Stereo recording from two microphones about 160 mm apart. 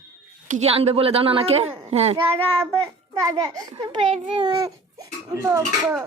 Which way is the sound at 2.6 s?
20° right (ahead or behind).